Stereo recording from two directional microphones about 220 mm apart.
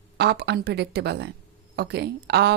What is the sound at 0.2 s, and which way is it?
A woman's voice, 50° right (ahead or behind).